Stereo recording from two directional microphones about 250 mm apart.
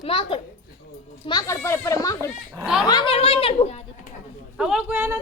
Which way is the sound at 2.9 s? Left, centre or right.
Centre.